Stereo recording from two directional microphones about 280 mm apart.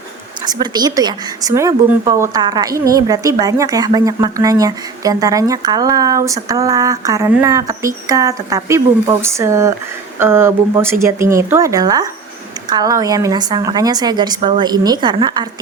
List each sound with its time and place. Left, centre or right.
0.4 s a woman's voice: centre